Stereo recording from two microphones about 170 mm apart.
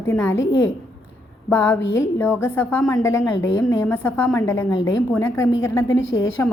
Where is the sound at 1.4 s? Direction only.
10° left (ahead or behind).